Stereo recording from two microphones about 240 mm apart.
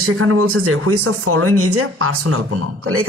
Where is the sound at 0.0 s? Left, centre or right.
Right.